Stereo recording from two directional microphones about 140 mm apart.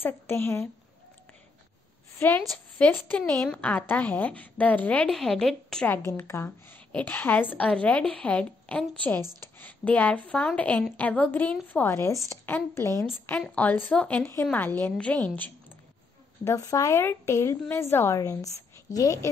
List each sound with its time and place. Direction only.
0.0 s a woman's voice: 15° left (ahead or behind)
2.1 s a woman's voice: 15° left (ahead or behind)
5.9 s a woman's voice: 15° left (ahead or behind)
16.4 s a woman's voice: 25° left (ahead or behind)
18.9 s a woman's voice: 65° left (ahead or behind)